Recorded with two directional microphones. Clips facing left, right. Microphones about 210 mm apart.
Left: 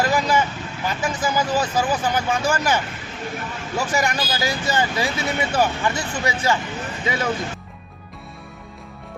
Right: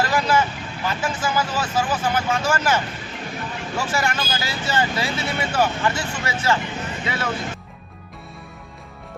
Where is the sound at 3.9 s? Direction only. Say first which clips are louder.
Left 1 dB; 15° left (ahead or behind).